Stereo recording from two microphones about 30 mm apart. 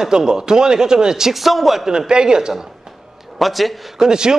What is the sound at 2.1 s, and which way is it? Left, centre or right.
Speech, right.